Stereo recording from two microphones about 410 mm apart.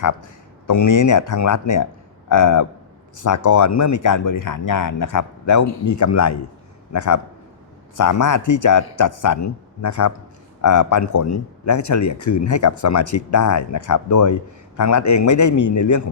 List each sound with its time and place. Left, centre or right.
0.0 s speech: left